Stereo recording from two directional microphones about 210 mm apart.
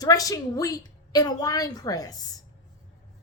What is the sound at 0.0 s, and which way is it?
Speech, 15° left (ahead or behind).